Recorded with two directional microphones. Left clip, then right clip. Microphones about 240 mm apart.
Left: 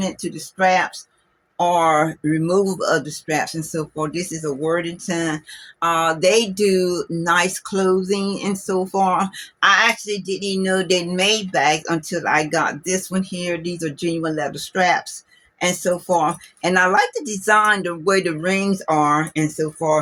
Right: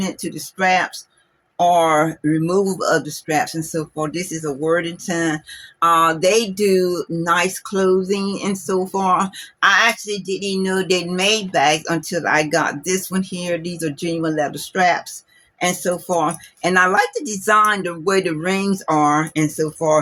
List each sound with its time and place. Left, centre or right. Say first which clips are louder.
0.0 s speech: even; centre